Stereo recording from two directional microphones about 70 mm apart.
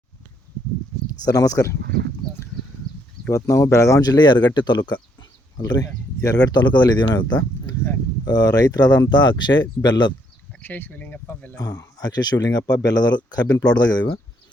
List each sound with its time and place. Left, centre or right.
1.2 s speech: left
3.3 s speech: left
4.0 s speech: left
5.5 s speech: left
6.1 s speech: left
8.2 s speech: left
9.0 s speech: left
10.6 s a sound: left
11.6 s speech: left
13.6 s speech: left